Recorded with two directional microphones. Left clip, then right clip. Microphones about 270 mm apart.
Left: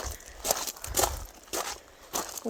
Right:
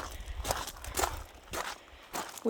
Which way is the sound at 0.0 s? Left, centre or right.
Left.